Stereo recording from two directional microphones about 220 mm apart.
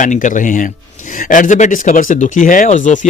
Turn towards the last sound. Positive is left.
turn(degrees=35)  # may be behind; listen again after turning